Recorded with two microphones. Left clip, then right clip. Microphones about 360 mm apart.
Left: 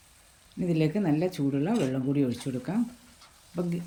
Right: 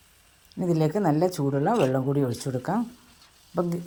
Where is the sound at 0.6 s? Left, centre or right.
Right.